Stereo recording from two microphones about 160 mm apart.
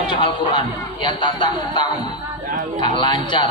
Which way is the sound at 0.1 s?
30° left (ahead or behind).